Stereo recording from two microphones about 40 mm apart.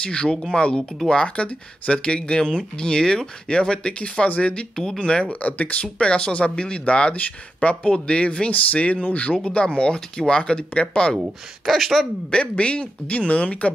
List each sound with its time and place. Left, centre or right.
0.0 s speech: left
5.2 s speech: left
5.9 s speech: left
9.3 s speech: left
11.1 s speech: centre
12.3 s speech: left